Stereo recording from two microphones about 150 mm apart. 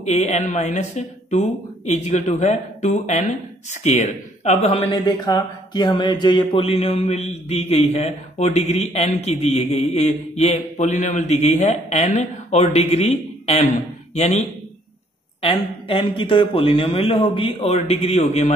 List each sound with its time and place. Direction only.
0.0 s speech: 50° left (ahead or behind)
15.4 s speech: 35° left (ahead or behind)